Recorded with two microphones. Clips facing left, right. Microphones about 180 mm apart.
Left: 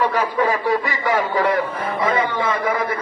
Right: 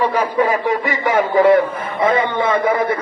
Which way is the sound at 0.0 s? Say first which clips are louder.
Right 3 dB; 15° right (ahead or behind).